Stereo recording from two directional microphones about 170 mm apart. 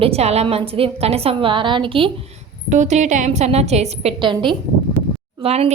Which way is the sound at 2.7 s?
45° right (ahead or behind).